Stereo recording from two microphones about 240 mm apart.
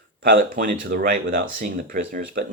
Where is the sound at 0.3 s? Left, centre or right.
Right.